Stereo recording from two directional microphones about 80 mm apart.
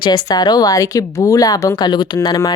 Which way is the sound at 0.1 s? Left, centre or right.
Left.